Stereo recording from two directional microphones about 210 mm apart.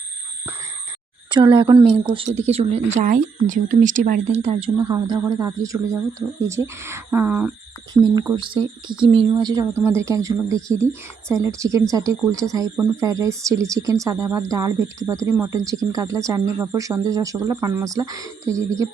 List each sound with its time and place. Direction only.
1.3 s a woman's voice: 20° right (ahead or behind)